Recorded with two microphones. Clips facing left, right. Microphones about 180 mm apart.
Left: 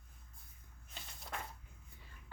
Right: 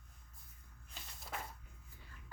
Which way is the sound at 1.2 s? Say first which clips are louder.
Even; 5° right (ahead or behind).